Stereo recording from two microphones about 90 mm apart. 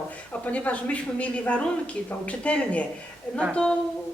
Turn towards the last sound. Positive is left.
turn(degrees=10)  # may be behind; listen again after turning